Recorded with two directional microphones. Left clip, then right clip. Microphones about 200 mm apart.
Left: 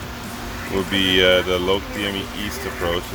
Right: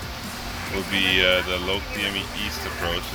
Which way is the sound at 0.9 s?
25° left (ahead or behind).